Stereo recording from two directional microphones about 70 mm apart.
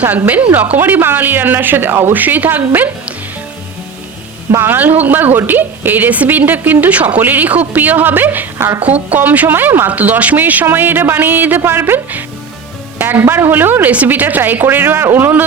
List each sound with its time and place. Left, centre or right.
0.3 s a woman's voice: right
4.5 s a woman's voice: right
8.5 s a woman's voice: right
8.8 s a woman's voice: right